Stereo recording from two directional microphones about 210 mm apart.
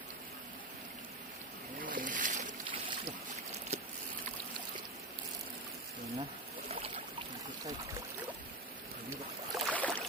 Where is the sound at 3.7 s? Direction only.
30° right (ahead or behind).